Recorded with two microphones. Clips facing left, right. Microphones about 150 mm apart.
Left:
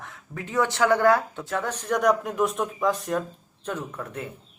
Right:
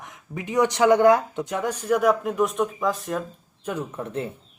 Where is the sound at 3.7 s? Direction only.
10° right (ahead or behind).